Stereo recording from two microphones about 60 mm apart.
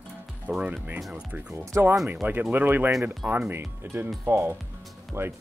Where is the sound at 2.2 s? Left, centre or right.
Right.